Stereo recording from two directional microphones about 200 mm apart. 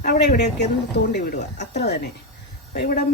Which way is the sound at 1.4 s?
35° left (ahead or behind).